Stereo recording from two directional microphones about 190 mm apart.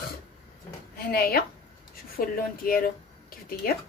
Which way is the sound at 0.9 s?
50° left (ahead or behind).